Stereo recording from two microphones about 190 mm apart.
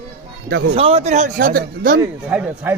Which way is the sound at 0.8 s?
30° right (ahead or behind).